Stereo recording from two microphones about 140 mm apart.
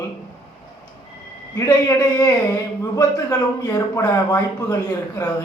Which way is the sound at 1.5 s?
25° left (ahead or behind).